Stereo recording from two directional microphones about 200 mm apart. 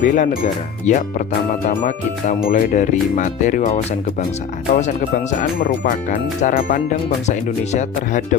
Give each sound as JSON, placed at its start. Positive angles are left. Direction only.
{"t": 0.0, "sound": "speech", "side_deg": 40}